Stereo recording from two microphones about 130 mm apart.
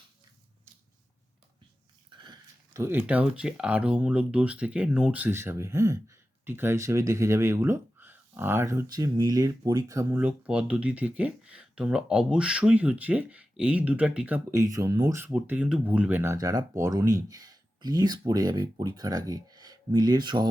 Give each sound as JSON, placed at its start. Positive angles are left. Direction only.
{"t": 2.0, "sound": "dog", "side_deg": -35}
{"t": 2.7, "sound": "speech", "side_deg": -20}
{"t": 10.2, "sound": "speech", "side_deg": -10}
{"t": 14.5, "sound": "speech", "side_deg": -25}